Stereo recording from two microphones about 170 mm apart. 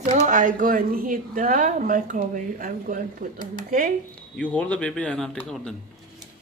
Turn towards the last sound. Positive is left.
turn(degrees=5)  # may be behind; listen again after turning